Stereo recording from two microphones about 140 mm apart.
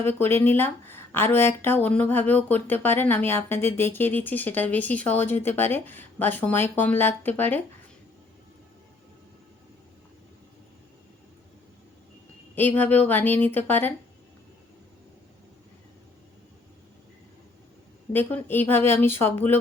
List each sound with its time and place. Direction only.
0.0 s speech: 15° left (ahead or behind)
12.5 s speech: 15° left (ahead or behind)
18.1 s speech: 15° left (ahead or behind)